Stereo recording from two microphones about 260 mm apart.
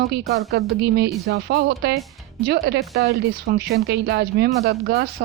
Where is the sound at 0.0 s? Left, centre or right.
Right.